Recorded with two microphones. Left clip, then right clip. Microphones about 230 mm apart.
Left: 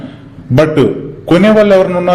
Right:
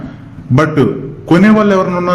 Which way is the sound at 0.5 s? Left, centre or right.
Centre.